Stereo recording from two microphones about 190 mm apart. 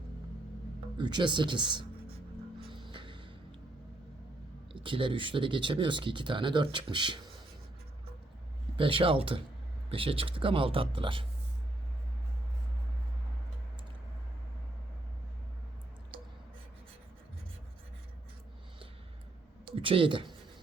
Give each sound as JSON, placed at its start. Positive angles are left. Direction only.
{"t": 0.9, "sound": "speech", "side_deg": -25}
{"t": 2.9, "sound": "music", "side_deg": -25}
{"t": 4.7, "sound": "speech", "side_deg": -25}
{"t": 8.7, "sound": "speech", "side_deg": -30}
{"t": 19.6, "sound": "speech", "side_deg": -30}